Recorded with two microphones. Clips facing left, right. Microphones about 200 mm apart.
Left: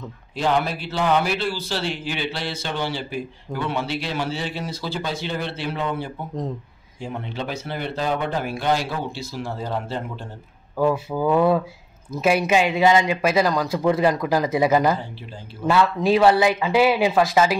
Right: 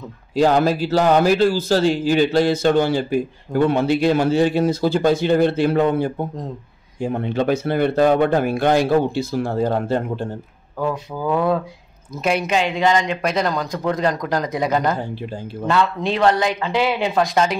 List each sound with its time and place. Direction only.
0.4 s a man's voice: 40° right (ahead or behind)
10.8 s speech: 5° left (ahead or behind)